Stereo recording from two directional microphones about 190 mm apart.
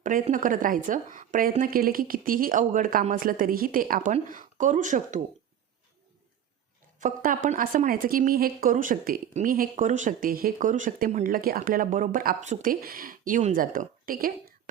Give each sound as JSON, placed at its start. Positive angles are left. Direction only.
{"t": 0.0, "sound": "a woman's voice", "side_deg": -45}
{"t": 7.0, "sound": "a woman's voice", "side_deg": -45}